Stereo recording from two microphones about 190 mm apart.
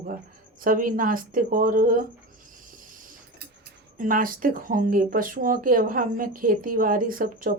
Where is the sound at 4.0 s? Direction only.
45° right (ahead or behind).